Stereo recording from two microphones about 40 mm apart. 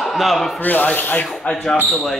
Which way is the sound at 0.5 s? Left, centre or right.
Left.